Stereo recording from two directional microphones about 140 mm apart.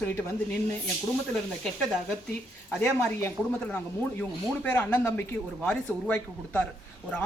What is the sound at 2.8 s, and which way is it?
Speech, 15° left (ahead or behind).